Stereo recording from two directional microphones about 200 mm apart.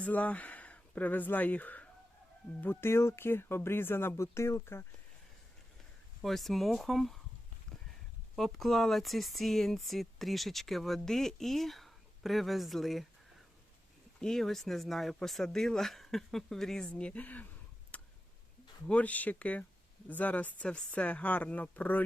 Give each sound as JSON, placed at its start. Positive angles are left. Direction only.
{"t": 0.0, "sound": "speech", "side_deg": 5}
{"t": 6.2, "sound": "speech", "side_deg": 0}
{"t": 8.4, "sound": "speech", "side_deg": 0}
{"t": 14.2, "sound": "speech", "side_deg": 0}
{"t": 17.9, "sound": "tick", "side_deg": 5}
{"t": 18.9, "sound": "speech", "side_deg": 5}